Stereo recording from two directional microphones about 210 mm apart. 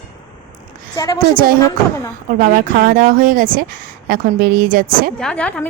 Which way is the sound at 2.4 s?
45° right (ahead or behind).